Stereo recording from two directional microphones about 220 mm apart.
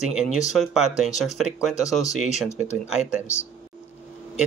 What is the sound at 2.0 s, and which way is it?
Speech, 30° left (ahead or behind).